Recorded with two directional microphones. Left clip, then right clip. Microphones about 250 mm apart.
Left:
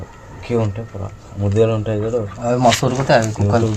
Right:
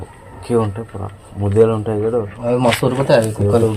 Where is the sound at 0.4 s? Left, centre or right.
Right.